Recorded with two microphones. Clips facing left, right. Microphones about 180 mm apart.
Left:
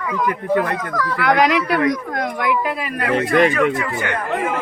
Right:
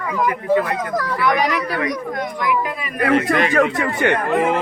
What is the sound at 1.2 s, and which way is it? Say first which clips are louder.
Speech: left 4 dB; 85° left.